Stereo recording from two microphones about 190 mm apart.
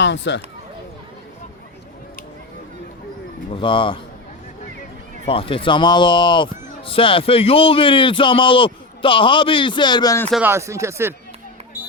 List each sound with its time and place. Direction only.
0.0 s speech: 70° left (ahead or behind)
3.5 s speech: 25° left (ahead or behind)
5.2 s speech: 30° left (ahead or behind)
10.4 s speech: 15° right (ahead or behind)